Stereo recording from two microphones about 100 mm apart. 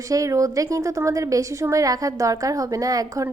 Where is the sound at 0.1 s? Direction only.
35° right (ahead or behind).